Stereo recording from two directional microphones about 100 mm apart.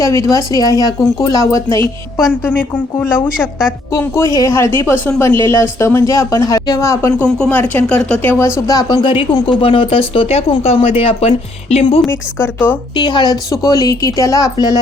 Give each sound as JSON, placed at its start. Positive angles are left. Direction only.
{"t": 0.0, "sound": "speech", "side_deg": 30}
{"t": 3.3, "sound": "a woman's voice", "side_deg": -5}
{"t": 3.9, "sound": "a woman's voice", "side_deg": 30}
{"t": 7.2, "sound": "speech", "side_deg": 10}
{"t": 7.5, "sound": "speech", "side_deg": 20}
{"t": 8.6, "sound": "speech", "side_deg": 40}
{"t": 9.0, "sound": "speech", "side_deg": 50}
{"t": 12.4, "sound": "a woman's voice", "side_deg": 20}
{"t": 13.0, "sound": "speech", "side_deg": 50}